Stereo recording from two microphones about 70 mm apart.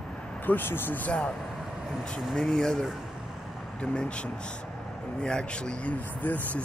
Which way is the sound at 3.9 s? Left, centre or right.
Centre.